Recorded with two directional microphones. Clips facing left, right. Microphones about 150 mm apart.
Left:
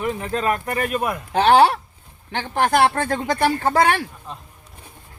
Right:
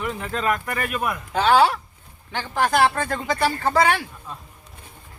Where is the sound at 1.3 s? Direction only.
60° left (ahead or behind).